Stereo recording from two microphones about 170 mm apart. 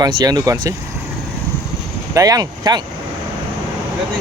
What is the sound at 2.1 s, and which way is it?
Speech, 20° right (ahead or behind).